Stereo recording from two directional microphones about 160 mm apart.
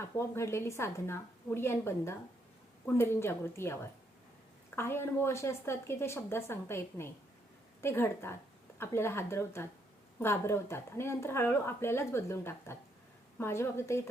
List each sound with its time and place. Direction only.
0.0 s speech: 15° left (ahead or behind)